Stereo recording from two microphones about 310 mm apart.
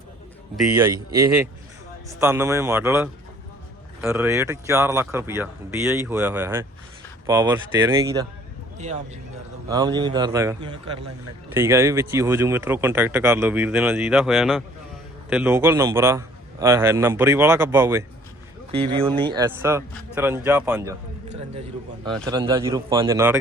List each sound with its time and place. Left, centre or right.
0.5 s a man's voice: centre
0.9 s speech: centre
9.6 s speech: centre
18.7 s speech: centre
22.3 s speech: centre